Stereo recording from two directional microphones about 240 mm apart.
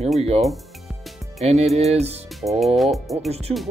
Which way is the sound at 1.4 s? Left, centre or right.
Right.